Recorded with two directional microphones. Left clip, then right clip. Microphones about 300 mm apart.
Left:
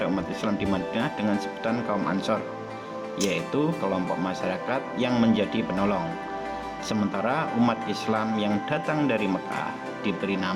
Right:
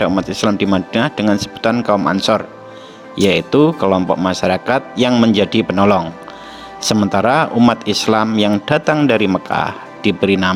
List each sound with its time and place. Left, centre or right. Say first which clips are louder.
0.0 s speech: right 12 dB; right